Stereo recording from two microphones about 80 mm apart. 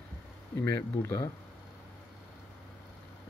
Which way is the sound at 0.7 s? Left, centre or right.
Left.